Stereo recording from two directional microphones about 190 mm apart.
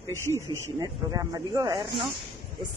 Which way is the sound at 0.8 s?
20° right (ahead or behind).